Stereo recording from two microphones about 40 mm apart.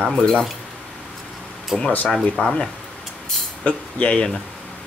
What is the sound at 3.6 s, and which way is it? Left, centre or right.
Speech, left.